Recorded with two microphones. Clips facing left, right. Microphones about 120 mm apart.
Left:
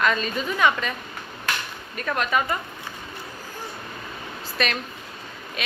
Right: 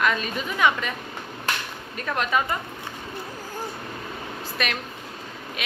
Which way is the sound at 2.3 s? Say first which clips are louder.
Even; 20° right (ahead or behind).